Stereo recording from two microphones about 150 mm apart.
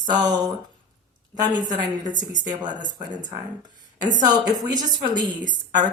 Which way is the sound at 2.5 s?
30° right (ahead or behind).